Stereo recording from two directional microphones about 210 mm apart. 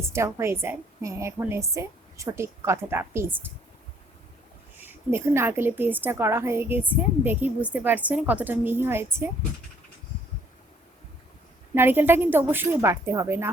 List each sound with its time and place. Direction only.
0.1 s a woman's voice: 15° right (ahead or behind)
4.8 s a woman's voice: 10° right (ahead or behind)
11.7 s a woman's voice: 10° right (ahead or behind)